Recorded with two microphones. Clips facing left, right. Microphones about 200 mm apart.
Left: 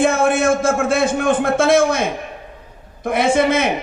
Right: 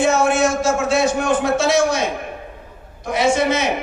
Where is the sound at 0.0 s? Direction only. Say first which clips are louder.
Left 1 dB; 55° left (ahead or behind).